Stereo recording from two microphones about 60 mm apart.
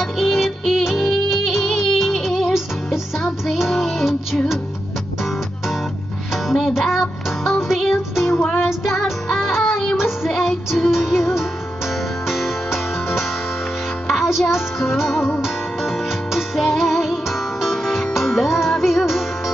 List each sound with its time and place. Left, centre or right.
0.0 s music: centre
6.3 s music: centre
14.3 s music: centre